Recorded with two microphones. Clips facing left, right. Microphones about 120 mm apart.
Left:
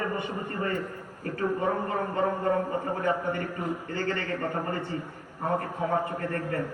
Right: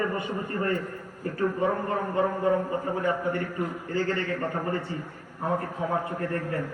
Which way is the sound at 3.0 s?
Centre (ahead or behind).